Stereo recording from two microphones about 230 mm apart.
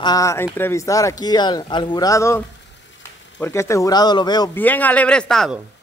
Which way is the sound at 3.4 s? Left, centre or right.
Centre.